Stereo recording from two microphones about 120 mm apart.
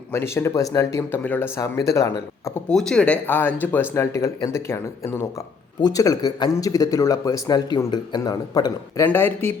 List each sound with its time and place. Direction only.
0.1 s a man's voice: 20° left (ahead or behind)
1.2 s a man's voice: 15° left (ahead or behind)
2.6 s a man's voice: 5° left (ahead or behind); by 9.0 s 35° left (ahead or behind)
9.0 s speech: 15° left (ahead or behind)